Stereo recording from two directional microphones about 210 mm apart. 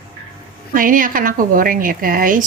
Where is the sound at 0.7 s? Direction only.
40° right (ahead or behind).